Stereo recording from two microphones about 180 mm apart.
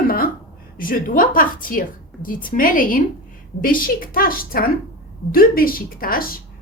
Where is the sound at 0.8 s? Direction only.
50° left (ahead or behind).